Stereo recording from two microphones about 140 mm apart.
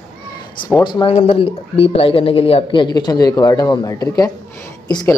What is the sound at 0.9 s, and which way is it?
A man's voice, 35° left (ahead or behind).